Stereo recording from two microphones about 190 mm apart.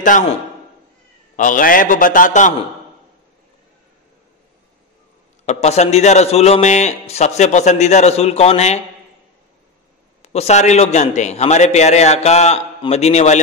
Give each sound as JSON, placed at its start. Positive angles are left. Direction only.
{"t": 1.3, "sound": "a man's voice", "side_deg": 45}
{"t": 5.4, "sound": "a man's voice", "side_deg": 35}
{"t": 10.2, "sound": "a man's voice", "side_deg": 35}